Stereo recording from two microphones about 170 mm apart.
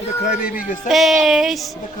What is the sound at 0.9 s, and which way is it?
Speech, centre (ahead or behind).